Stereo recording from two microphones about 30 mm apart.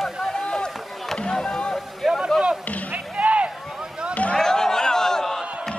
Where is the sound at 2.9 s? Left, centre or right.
Right.